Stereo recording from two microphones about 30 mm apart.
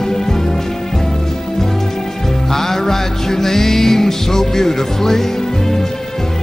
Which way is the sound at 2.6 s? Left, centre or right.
Centre.